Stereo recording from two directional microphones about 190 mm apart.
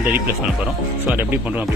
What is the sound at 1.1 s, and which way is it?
Speech, 10° right (ahead or behind).